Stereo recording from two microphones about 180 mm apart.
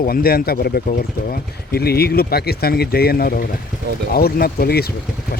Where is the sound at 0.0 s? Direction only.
55° left (ahead or behind).